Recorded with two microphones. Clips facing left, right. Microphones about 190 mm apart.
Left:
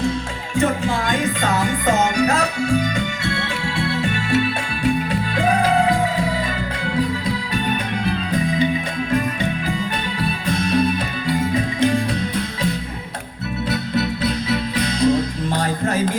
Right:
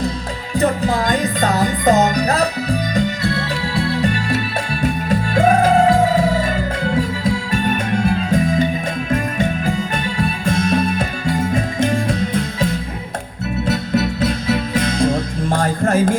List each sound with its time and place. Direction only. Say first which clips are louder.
0.5 s music: right 2 dB; 40° right (ahead or behind)
8.0 s music: right 4 dB; 45° right (ahead or behind)
10.2 s music: right 4 dB; 45° right (ahead or behind)
13.7 s music: right 3 dB; 45° right (ahead or behind)